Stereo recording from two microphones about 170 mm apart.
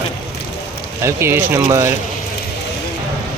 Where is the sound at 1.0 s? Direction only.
15° right (ahead or behind).